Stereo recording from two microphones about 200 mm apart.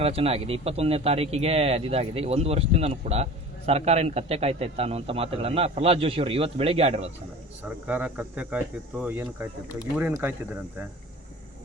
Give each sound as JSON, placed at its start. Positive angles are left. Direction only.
{"t": 0.0, "sound": "a man's voice", "side_deg": -30}
{"t": 7.9, "sound": "speech", "side_deg": -5}